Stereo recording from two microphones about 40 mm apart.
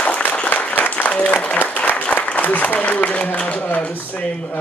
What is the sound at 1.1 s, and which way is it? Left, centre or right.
Speech, left.